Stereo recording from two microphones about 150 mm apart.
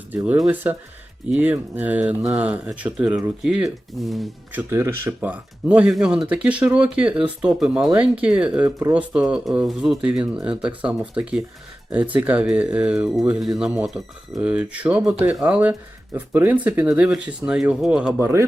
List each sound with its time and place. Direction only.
0.3 s speech: 5° right (ahead or behind)
4.5 s speech: 15° right (ahead or behind)
18.2 s speech: 15° right (ahead or behind)